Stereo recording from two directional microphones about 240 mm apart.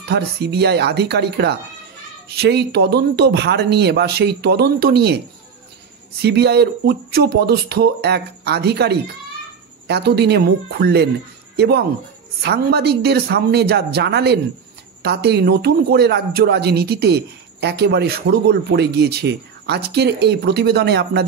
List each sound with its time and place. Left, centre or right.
0.1 s a man's voice: right
6.2 s a man's voice: right